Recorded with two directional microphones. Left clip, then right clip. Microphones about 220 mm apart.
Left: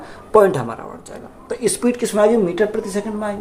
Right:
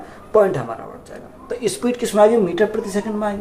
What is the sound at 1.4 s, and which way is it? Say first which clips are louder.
Speech: left 2 dB; 25° left (ahead or behind).